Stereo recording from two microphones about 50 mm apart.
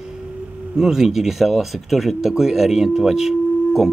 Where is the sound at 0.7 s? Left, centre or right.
Centre.